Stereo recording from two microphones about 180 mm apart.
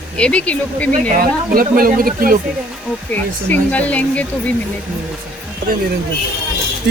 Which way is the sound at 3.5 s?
10° left (ahead or behind).